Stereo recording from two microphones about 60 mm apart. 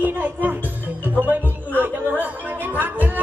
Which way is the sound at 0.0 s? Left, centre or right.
Right.